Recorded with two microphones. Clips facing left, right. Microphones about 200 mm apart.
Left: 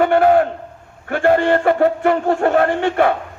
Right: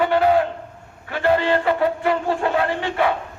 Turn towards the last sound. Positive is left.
turn(degrees=50)  # may be behind; listen again after turning